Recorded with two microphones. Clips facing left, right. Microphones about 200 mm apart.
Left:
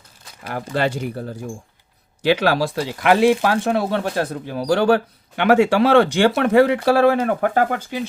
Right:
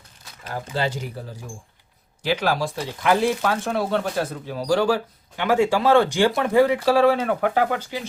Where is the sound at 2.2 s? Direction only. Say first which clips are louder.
Left 5 dB; 70° left (ahead or behind).